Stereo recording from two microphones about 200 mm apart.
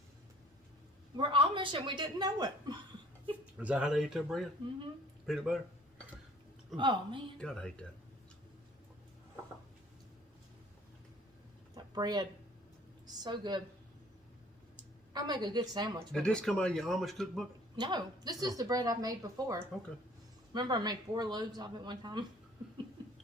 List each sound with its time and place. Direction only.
1.1 s speech: 25° right (ahead or behind)
3.6 s speech: 5° right (ahead or behind)
6.7 s speech: 25° right (ahead or behind)
7.3 s speech: 5° left (ahead or behind)
11.7 s a sound: 20° right (ahead or behind)
13.2 s speech: 20° right (ahead or behind)
15.1 s speech: 20° right (ahead or behind)
16.1 s speech: 5° left (ahead or behind)
17.7 s speech: 20° right (ahead or behind)